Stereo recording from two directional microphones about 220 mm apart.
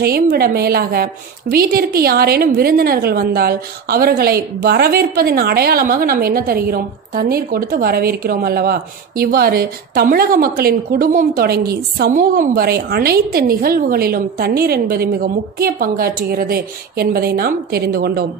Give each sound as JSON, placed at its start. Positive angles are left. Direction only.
{"t": 0.0, "sound": "a woman's voice", "side_deg": -45}